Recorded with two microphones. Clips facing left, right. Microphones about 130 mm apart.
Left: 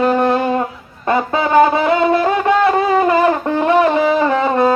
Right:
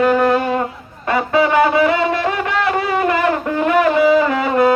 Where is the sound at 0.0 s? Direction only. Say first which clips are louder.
Even; 30° left (ahead or behind).